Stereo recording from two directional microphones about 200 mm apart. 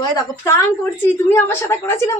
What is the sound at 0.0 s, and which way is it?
A woman's voice, 15° left (ahead or behind).